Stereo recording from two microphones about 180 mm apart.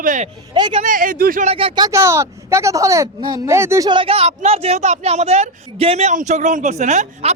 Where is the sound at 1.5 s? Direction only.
30° right (ahead or behind).